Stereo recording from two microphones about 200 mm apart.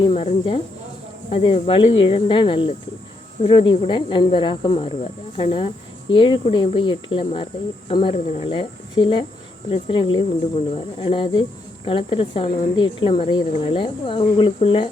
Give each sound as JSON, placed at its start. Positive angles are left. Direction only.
{"t": 0.1, "sound": "speech", "side_deg": 30}